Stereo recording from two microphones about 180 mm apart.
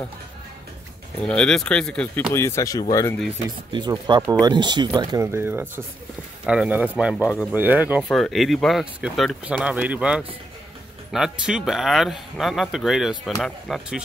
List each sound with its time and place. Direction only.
1.2 s speech: 5° left (ahead or behind); by 3.2 s 20° left (ahead or behind)
3.4 s speech: 25° right (ahead or behind); by 14.0 s centre (ahead or behind)